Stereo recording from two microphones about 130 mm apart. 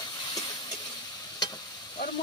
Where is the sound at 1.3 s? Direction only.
35° left (ahead or behind).